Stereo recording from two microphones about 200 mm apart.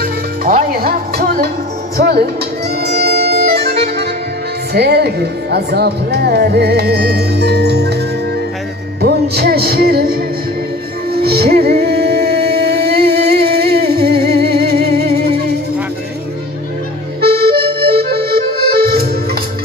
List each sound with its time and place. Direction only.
0.0 s music: 50° right (ahead or behind)
2.8 s music: 55° right (ahead or behind)
4.7 s speech: 55° right (ahead or behind)
9.0 s music: 55° right (ahead or behind)
12.4 s a sound: 50° right (ahead or behind)
17.3 s accordion: 25° right (ahead or behind)
18.0 s accordion: 50° right (ahead or behind)